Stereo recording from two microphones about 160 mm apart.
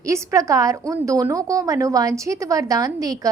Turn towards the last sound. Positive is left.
turn(degrees=-20)  # may be behind; listen again after turning